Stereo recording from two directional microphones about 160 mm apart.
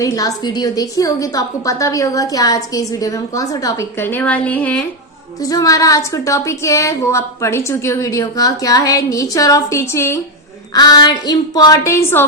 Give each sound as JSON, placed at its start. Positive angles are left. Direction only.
{"t": 0.0, "sound": "a woman's voice", "side_deg": 20}
{"t": 5.4, "sound": "a woman's voice", "side_deg": 20}